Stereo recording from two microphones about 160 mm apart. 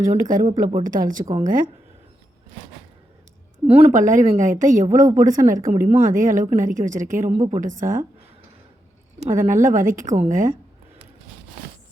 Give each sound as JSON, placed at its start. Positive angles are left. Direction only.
{"t": 0.1, "sound": "speech", "side_deg": -55}
{"t": 3.7, "sound": "a woman's voice", "side_deg": -40}
{"t": 9.2, "sound": "speech", "side_deg": -55}